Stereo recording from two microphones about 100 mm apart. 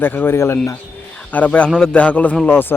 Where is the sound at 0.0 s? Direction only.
20° left (ahead or behind).